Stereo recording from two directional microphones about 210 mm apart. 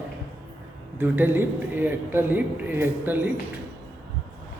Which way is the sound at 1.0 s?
10° right (ahead or behind).